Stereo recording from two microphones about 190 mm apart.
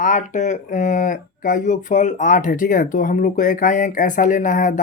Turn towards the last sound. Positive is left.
turn(degrees=45)  # may be behind; listen again after turning